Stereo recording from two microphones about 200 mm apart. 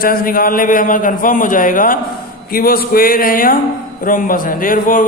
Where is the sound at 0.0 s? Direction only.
45° left (ahead or behind).